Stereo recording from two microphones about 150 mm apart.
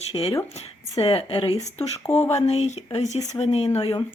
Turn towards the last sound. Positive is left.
turn(degrees=35)  # may be behind; listen again after turning